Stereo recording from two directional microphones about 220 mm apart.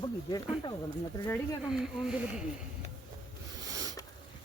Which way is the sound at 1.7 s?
Centre (ahead or behind).